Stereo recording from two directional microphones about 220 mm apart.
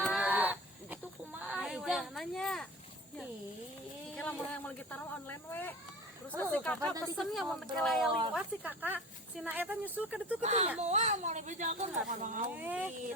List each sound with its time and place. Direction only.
0.0 s a sound: centre (ahead or behind)
4.1 s a woman's voice: 5° left (ahead or behind)
10.4 s speech: 30° right (ahead or behind)
12.5 s speech: 5° right (ahead or behind)